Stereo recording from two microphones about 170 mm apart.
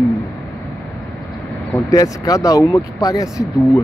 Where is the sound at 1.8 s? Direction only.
20° left (ahead or behind).